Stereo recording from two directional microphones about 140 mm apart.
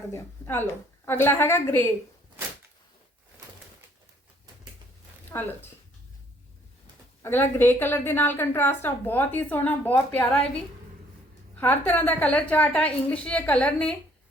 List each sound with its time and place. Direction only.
0.1 s a woman's voice: 15° left (ahead or behind)
5.3 s a woman's voice: 15° left (ahead or behind)
7.2 s a woman's voice: 15° left (ahead or behind)
11.5 s a woman's voice: 10° left (ahead or behind)